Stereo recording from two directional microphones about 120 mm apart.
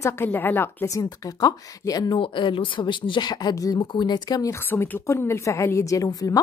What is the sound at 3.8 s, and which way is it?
Speech, 40° left (ahead or behind).